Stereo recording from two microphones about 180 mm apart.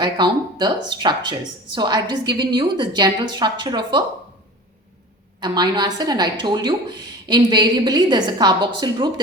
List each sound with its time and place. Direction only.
0.0 s speech: 25° right (ahead or behind)
5.4 s speech: 25° right (ahead or behind)